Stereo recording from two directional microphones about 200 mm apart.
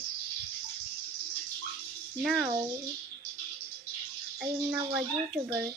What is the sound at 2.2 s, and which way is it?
Speech, 5° right (ahead or behind).